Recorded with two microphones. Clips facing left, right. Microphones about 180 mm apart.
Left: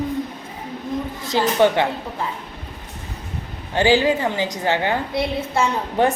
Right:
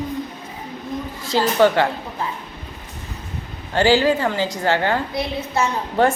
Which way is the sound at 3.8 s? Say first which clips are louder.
Right 1 dB; 15° left (ahead or behind).